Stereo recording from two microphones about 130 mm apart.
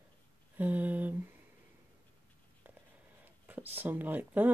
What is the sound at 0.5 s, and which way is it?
Speech, 10° right (ahead or behind).